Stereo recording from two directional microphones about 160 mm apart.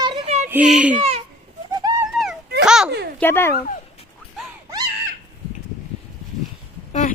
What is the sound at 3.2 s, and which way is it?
Speech, 15° left (ahead or behind).